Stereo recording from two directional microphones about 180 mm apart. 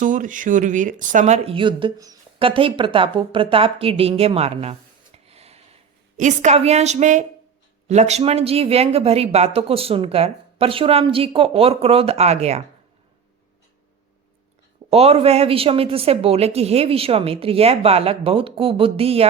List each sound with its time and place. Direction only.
0.0 s speech: 45° right (ahead or behind)
14.8 s speech: 35° right (ahead or behind)